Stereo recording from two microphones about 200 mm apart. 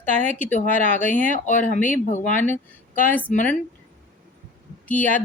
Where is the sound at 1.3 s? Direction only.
40° left (ahead or behind).